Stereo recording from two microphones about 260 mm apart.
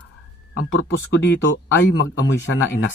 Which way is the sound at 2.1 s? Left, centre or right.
Left.